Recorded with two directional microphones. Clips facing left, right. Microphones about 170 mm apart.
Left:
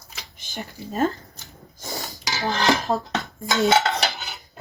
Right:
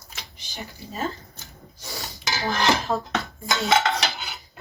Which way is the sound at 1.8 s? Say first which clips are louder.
Left 4 dB; 45° left (ahead or behind).